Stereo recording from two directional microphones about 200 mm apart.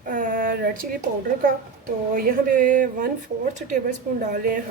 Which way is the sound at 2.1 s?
45° right (ahead or behind).